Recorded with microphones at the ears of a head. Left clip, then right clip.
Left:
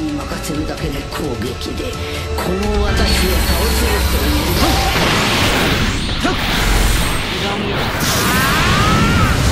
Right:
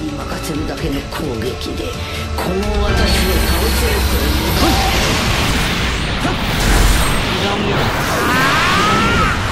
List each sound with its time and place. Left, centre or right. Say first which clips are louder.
3.0 s speech: right 2 dB; centre
4.6 s music: right 1 dB; centre
8.0 s a sound: even; centre